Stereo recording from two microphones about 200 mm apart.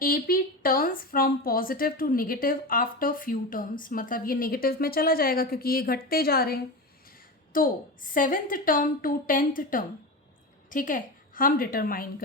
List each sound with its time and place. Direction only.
0.0 s a woman's voice: 45° left (ahead or behind)